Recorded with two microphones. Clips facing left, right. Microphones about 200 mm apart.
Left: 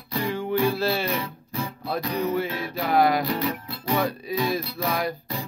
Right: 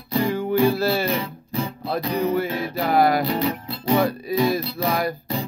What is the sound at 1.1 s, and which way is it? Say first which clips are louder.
Music: right 4 dB; 25° right (ahead or behind).